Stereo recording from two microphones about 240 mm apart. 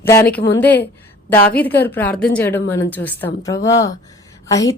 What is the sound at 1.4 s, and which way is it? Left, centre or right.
Speech, left.